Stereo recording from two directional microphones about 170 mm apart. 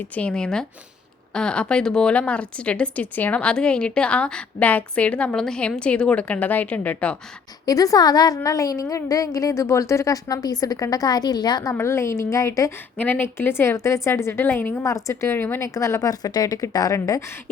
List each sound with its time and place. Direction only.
0.2 s a woman's voice: 5° left (ahead or behind)
7.6 s a woman's voice: 20° left (ahead or behind)